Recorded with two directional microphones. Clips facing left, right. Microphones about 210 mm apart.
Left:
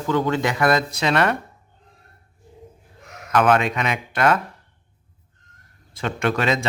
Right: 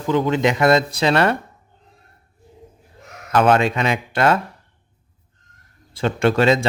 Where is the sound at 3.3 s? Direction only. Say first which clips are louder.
Right 2 dB; 30° right (ahead or behind).